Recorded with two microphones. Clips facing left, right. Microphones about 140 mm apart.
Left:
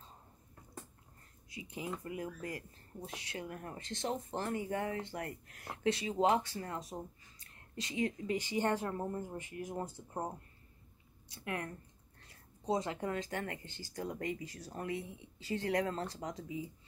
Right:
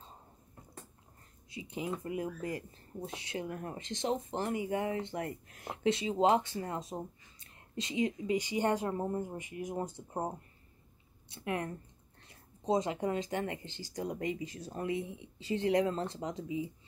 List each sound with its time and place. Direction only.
1.5 s speech: 25° right (ahead or behind)